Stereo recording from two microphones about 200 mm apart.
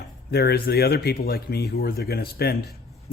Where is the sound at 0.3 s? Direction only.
50° left (ahead or behind).